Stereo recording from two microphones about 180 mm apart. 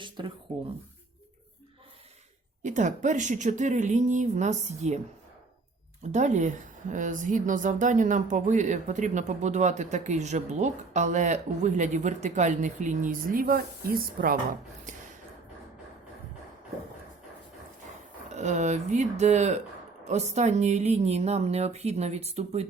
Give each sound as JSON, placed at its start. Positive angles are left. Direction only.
{"t": 0.2, "sound": "speech", "side_deg": -25}
{"t": 2.6, "sound": "speech", "side_deg": -45}
{"t": 6.0, "sound": "speech", "side_deg": -40}
{"t": 14.9, "sound": "a sound", "side_deg": -45}
{"t": 18.3, "sound": "speech", "side_deg": -40}